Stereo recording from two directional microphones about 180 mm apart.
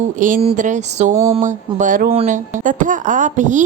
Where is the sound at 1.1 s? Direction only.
15° right (ahead or behind).